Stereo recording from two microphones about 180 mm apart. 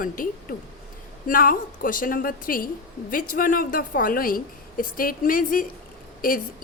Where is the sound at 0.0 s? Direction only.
50° left (ahead or behind).